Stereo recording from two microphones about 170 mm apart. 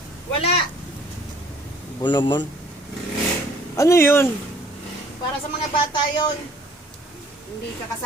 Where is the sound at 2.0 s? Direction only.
25° left (ahead or behind).